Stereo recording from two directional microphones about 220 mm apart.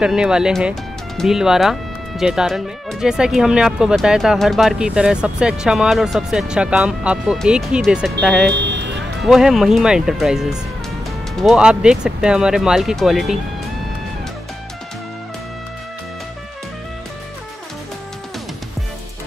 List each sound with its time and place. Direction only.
0.0 s speech: 5° right (ahead or behind)
8.5 s music: 50° right (ahead or behind)
9.2 s speech: centre (ahead or behind)